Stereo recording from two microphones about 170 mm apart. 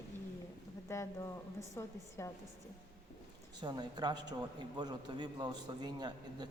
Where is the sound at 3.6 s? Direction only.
25° right (ahead or behind).